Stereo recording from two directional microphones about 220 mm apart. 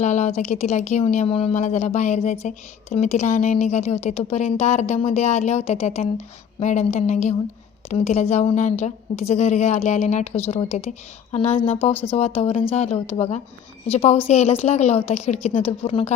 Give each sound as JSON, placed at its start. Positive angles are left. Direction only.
{"t": 0.0, "sound": "a woman's voice", "side_deg": 30}